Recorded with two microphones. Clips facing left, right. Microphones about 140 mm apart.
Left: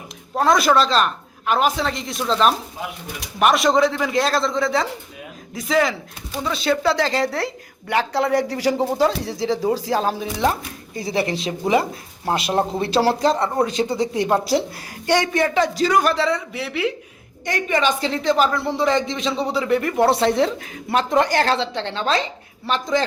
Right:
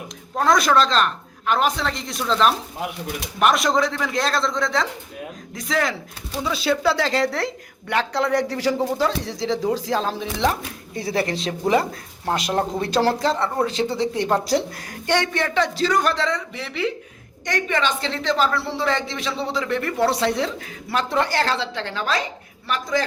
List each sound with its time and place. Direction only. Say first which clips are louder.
0.3 s a woman's voice: left 1 dB; centre (ahead or behind)
11.1 s a woman's voice: left 1 dB; 25° left (ahead or behind)
11.3 s a woman's voice: even; 5° left (ahead or behind)
20.1 s a woman's voice: left 4 dB; 25° left (ahead or behind)